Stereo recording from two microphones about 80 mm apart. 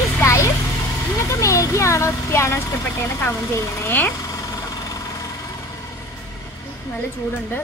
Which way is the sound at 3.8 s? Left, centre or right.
Left.